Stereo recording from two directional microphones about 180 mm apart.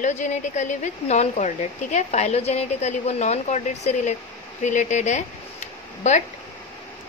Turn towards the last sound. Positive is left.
turn(degrees=40)  # may be behind; listen again after turning